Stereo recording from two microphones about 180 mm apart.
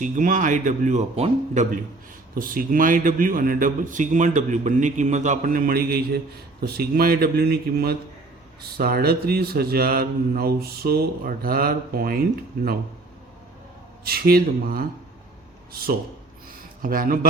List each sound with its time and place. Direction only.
0.0 s a man's voice: 45° right (ahead or behind)
2.3 s a man's voice: 50° right (ahead or behind)
14.0 s a man's voice: 55° right (ahead or behind)
16.8 s a man's voice: 50° right (ahead or behind)